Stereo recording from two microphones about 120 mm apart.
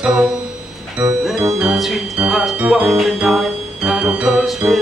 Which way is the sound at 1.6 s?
5° right (ahead or behind).